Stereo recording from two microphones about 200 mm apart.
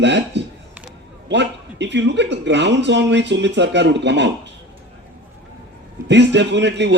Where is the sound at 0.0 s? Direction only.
60° right (ahead or behind).